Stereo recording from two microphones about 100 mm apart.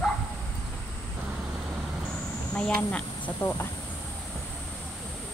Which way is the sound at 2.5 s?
10° left (ahead or behind).